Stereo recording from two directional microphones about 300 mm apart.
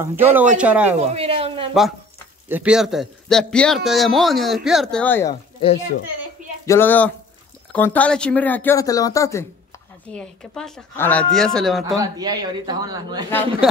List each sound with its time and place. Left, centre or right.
0.0 s a man's voice: centre
0.9 s speech: centre
2.4 s a man's voice: centre
6.6 s a man's voice: centre
12.0 s a man's voice: centre